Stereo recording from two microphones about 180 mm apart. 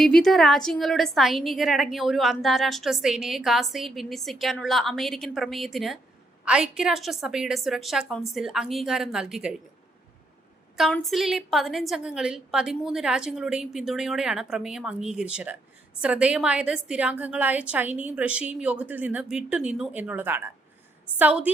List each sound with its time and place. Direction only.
0.0 s a woman's voice: centre (ahead or behind)
10.8 s a woman's voice: centre (ahead or behind)